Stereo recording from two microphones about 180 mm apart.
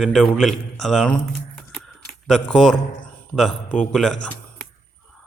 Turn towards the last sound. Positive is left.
turn(degrees=5)  # may be behind; listen again after turning